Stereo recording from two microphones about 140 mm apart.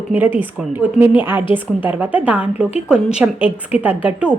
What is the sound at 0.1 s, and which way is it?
Speech, 15° right (ahead or behind).